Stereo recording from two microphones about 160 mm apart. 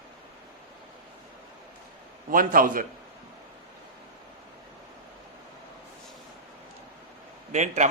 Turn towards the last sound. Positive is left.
turn(degrees=-45)  # may be behind; listen again after turning